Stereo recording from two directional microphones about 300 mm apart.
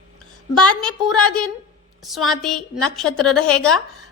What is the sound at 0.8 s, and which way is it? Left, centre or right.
A woman's voice, centre.